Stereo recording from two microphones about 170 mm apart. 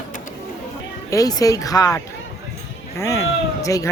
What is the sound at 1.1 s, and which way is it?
Speech, 20° left (ahead or behind).